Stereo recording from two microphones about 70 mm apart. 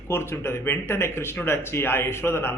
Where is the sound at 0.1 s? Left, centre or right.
Left.